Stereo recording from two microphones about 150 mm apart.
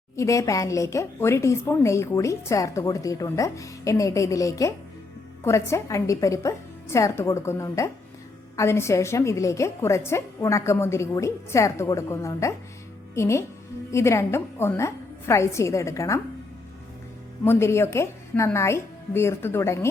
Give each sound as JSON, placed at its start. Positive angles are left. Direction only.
{"t": 0.2, "sound": "a woman's voice", "side_deg": 20}
{"t": 17.4, "sound": "a woman's voice", "side_deg": 15}